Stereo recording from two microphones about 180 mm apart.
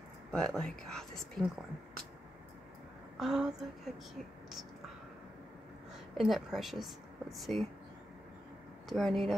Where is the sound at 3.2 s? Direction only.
5° right (ahead or behind).